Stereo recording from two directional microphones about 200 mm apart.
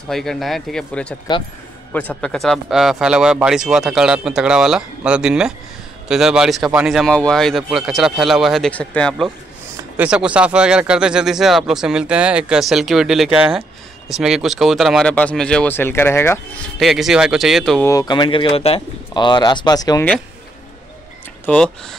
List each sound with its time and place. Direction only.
0.1 s speech: centre (ahead or behind)
9.9 s speech: 5° right (ahead or behind); by 16.3 s 10° left (ahead or behind)
16.7 s speech: centre (ahead or behind)
17.8 s speech: 20° left (ahead or behind)
21.5 s speech: 5° left (ahead or behind)